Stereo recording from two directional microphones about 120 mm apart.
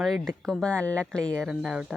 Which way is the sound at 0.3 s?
5° left (ahead or behind).